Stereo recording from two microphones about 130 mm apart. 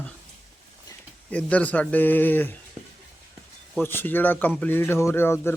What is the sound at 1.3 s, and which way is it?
Speech, 10° left (ahead or behind).